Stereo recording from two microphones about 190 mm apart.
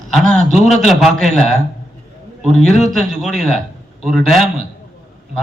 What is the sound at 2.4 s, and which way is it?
A man's voice, 5° left (ahead or behind).